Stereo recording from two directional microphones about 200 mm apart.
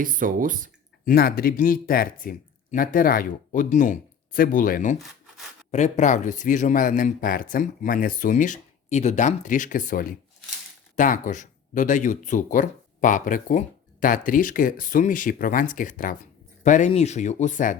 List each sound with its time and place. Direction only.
0.0 s speech: 45° right (ahead or behind)
1.0 s speech: 50° left (ahead or behind)